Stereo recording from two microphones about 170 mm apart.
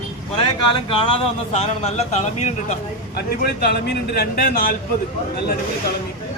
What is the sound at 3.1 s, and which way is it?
Speech, 65° left (ahead or behind).